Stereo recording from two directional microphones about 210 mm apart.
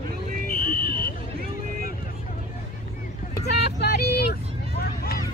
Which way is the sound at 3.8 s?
50° left (ahead or behind).